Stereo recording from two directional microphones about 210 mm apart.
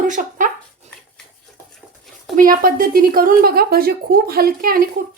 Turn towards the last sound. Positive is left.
turn(degrees=-45)  # may be behind; listen again after turning